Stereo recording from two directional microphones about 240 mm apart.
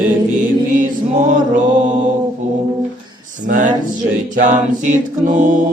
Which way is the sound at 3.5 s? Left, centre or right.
Right.